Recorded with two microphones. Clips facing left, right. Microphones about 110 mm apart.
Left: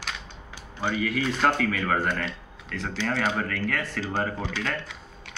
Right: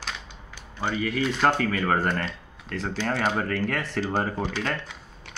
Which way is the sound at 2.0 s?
40° right (ahead or behind).